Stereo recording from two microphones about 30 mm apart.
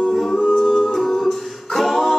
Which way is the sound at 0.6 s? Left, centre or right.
Centre.